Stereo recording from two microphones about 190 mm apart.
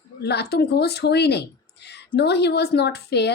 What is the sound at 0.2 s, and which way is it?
Speech, 60° left (ahead or behind).